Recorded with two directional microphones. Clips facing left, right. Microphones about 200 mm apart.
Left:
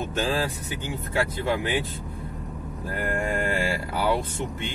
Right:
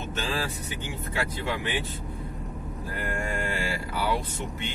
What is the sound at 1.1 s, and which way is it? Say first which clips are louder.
Mantra: left 5 dB; 50° left (ahead or behind).